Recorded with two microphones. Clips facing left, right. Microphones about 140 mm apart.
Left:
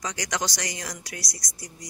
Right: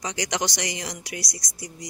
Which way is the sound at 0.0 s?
20° right (ahead or behind).